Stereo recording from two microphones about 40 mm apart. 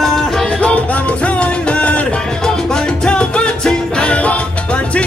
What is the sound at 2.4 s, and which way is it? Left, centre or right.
Music, centre.